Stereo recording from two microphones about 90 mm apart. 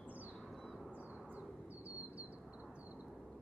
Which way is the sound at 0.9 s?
15° right (ahead or behind).